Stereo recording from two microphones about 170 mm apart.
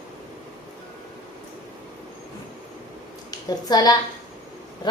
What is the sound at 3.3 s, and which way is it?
Speech, 25° left (ahead or behind).